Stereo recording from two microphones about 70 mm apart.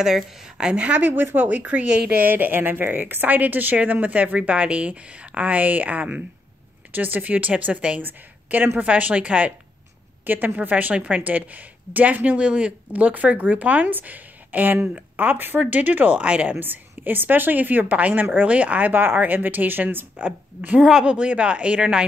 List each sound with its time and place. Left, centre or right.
0.0 s a woman's voice: centre
16.5 s a woman's voice: right
20.2 s a woman's voice: centre